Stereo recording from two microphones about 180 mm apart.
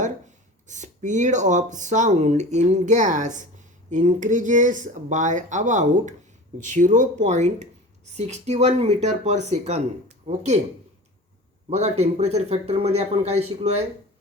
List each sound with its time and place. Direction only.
0.7 s speech: 40° right (ahead or behind)
11.7 s speech: 35° right (ahead or behind)